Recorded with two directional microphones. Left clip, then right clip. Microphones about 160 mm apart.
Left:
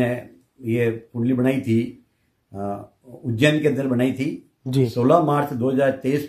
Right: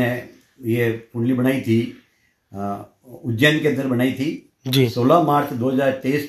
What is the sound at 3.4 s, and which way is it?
Speech, 30° left (ahead or behind).